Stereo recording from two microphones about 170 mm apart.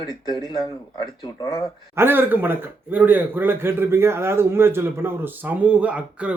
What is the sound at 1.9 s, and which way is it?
A man's voice, 10° right (ahead or behind).